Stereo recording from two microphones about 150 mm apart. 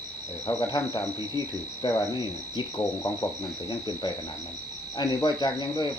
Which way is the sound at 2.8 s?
20° left (ahead or behind).